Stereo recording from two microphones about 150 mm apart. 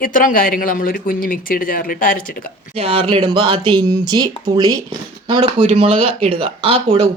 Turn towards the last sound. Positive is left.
turn(degrees=-40)  # may be behind; listen again after turning